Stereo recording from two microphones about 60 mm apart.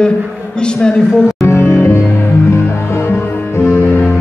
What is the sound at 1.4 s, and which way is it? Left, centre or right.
Music, left.